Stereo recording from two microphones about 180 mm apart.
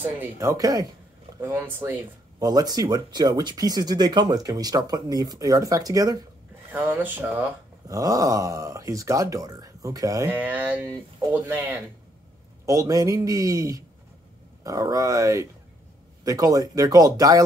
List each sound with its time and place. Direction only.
0.0 s speech: 15° right (ahead or behind)
7.9 s speech: 20° right (ahead or behind)